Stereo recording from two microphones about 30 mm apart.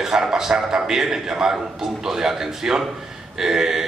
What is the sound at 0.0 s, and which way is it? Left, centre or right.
A man's voice, centre.